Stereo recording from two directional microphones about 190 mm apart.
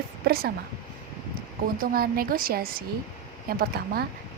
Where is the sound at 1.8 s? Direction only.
50° right (ahead or behind).